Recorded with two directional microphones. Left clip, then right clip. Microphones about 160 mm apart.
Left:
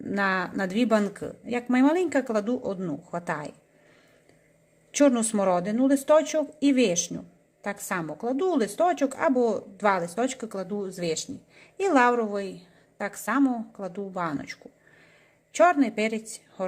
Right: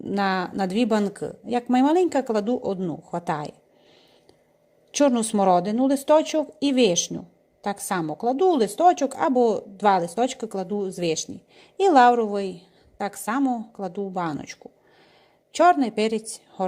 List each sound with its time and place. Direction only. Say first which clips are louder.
0.0 s a woman's voice: right 2 dB; 30° right (ahead or behind)
4.9 s a woman's voice: right 1 dB; 25° right (ahead or behind)